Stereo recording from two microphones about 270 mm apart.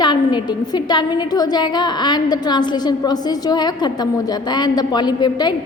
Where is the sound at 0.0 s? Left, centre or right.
Centre.